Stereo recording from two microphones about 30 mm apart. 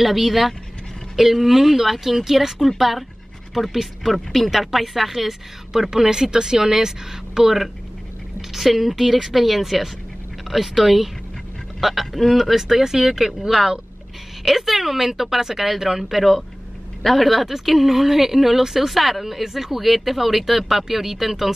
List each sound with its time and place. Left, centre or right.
0.0 s speech: centre; by 7.5 s right
8.4 s speech: centre
12.5 s speech: centre